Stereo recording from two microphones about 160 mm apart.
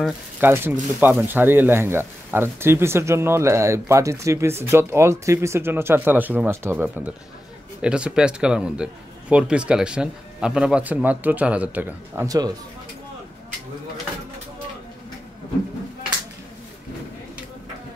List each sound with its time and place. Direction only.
0.0 s a man's voice: 10° right (ahead or behind)